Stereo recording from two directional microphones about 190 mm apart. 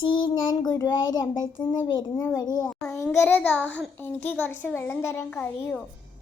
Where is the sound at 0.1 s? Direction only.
25° left (ahead or behind).